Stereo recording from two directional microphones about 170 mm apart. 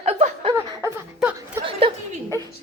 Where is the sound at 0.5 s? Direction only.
15° right (ahead or behind).